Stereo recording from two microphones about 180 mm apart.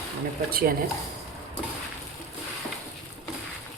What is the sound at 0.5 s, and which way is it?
Speech, 55° right (ahead or behind).